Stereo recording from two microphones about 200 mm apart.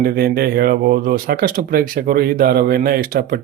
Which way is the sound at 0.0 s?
50° right (ahead or behind).